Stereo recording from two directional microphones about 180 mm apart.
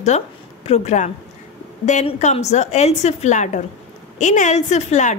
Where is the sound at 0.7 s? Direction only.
35° left (ahead or behind).